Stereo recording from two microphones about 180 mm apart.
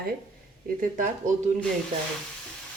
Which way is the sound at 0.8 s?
45° right (ahead or behind).